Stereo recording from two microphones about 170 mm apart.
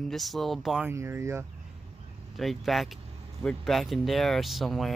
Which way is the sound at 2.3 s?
Centre (ahead or behind).